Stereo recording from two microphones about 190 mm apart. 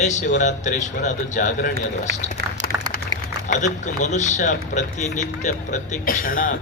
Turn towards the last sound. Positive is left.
turn(degrees=45)  # may be behind; listen again after turning